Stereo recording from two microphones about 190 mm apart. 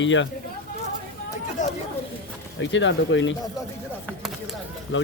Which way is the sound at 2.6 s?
75° left (ahead or behind).